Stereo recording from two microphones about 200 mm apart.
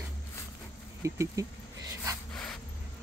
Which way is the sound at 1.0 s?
15° right (ahead or behind).